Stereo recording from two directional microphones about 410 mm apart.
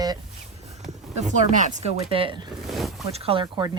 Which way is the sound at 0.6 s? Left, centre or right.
Centre.